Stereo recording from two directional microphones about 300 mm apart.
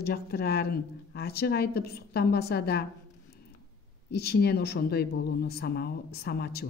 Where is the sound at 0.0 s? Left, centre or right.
Left.